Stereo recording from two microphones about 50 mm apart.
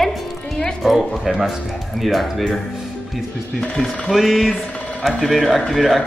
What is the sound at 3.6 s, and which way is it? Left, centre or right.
A woman's voice, centre.